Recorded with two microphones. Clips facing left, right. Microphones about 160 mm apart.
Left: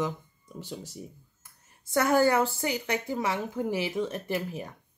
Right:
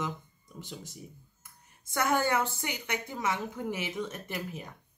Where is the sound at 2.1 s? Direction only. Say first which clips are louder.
Left 6 dB; 35° left (ahead or behind).